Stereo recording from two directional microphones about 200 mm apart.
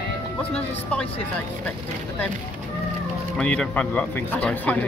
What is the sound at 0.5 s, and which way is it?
Speech, 5° left (ahead or behind).